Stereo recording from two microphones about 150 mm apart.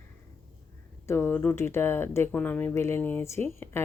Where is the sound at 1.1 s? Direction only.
15° left (ahead or behind).